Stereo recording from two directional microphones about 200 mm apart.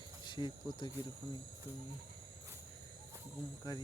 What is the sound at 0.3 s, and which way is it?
Speech, 25° left (ahead or behind).